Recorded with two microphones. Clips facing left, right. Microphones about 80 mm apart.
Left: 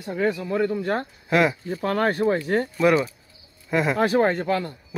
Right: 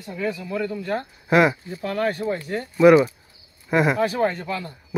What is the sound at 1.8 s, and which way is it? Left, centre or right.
Speech, left.